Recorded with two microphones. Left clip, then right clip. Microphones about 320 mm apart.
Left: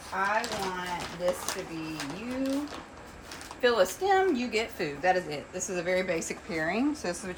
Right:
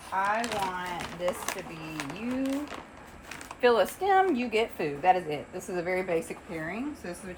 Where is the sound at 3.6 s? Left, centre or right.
Centre.